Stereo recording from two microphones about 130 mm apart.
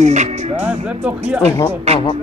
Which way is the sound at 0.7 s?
10° right (ahead or behind).